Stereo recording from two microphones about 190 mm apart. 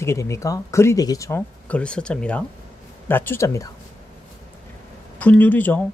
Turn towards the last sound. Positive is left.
turn(degrees=10)  # may be behind; listen again after turning